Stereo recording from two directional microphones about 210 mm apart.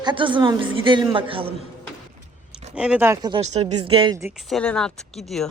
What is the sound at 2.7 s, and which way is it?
A woman's voice, 5° right (ahead or behind).